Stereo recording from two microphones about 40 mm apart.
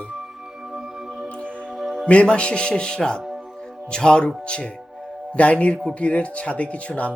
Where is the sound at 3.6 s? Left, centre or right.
Centre.